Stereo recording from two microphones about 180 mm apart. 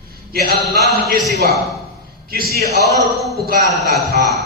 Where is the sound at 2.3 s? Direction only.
55° right (ahead or behind).